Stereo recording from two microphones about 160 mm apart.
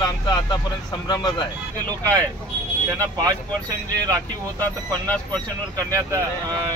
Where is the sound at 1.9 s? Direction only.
20° right (ahead or behind).